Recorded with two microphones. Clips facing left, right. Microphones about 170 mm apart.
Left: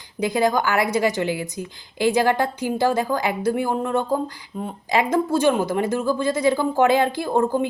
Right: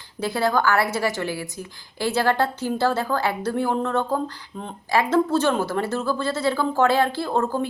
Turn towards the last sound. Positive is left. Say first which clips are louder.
# left 3 dB
turn(degrees=15)  # may be behind; listen again after turning